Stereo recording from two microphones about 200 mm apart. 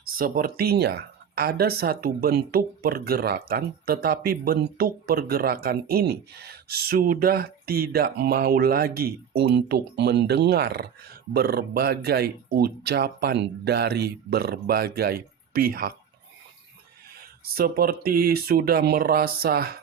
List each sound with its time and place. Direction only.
0.2 s speech: 45° right (ahead or behind)
17.4 s speech: 50° right (ahead or behind)